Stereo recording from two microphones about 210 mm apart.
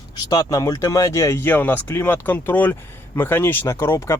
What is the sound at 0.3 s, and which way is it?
Speech, 20° left (ahead or behind).